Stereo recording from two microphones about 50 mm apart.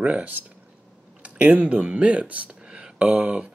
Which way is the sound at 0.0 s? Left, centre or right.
Right.